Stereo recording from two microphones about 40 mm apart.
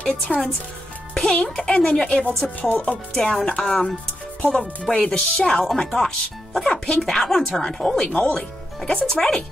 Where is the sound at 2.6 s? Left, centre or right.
Left.